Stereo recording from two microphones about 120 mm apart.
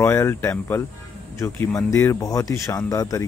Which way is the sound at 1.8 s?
30° left (ahead or behind).